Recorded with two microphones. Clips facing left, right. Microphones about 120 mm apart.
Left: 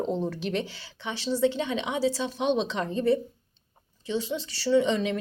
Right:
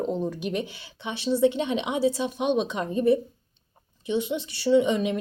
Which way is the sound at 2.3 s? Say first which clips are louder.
Right 1 dB; 10° right (ahead or behind).